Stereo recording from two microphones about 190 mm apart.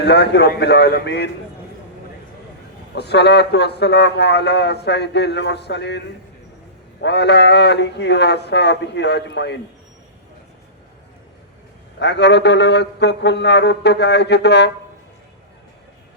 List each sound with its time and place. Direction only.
0.0 s a man's voice: 65° left (ahead or behind)
2.9 s a man's voice: 60° left (ahead or behind)
11.9 s a man's voice: 65° left (ahead or behind)